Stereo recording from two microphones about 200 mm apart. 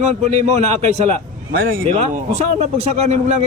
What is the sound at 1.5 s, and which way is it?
Speech, 45° right (ahead or behind).